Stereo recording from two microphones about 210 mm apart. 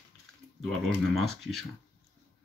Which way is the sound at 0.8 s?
Centre (ahead or behind).